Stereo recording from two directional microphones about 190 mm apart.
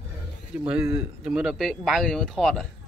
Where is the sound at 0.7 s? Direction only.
5° right (ahead or behind).